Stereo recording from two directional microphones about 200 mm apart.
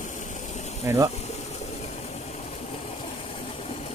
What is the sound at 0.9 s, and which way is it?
Speech, 10° right (ahead or behind).